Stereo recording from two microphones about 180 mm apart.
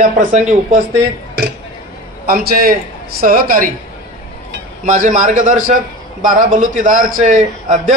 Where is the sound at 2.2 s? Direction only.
55° right (ahead or behind).